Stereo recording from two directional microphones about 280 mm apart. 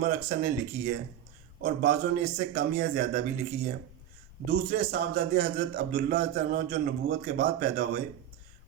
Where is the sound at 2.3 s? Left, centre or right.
Right.